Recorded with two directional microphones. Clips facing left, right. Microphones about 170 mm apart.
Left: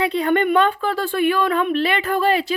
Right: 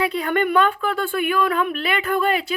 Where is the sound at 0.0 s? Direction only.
25° left (ahead or behind).